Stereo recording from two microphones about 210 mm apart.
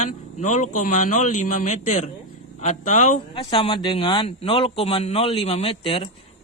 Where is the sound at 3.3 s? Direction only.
25° left (ahead or behind).